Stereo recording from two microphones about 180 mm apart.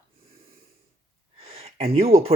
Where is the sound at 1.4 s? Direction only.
35° right (ahead or behind).